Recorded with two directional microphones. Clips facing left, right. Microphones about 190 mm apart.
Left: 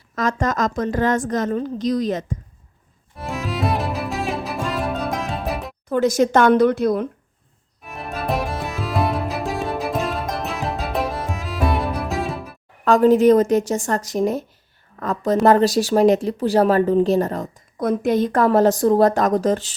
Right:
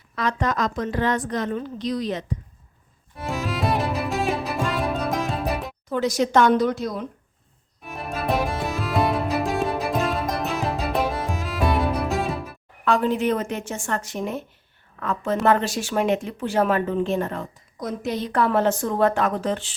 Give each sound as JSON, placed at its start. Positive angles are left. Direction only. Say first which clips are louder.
{"t": 0.2, "sound": "a woman's voice", "louder": "left 3 dB", "side_deg": 45}
{"t": 3.2, "sound": "music", "louder": "left 1 dB", "side_deg": 0}
{"t": 5.9, "sound": "a woman's voice", "louder": "left 4 dB", "side_deg": 50}
{"t": 7.8, "sound": "music", "louder": "left 1 dB", "side_deg": 0}
{"t": 12.8, "sound": "speech", "louder": "left 8 dB", "side_deg": 40}
{"t": 17.7, "sound": "speech", "louder": "left 9 dB", "side_deg": 55}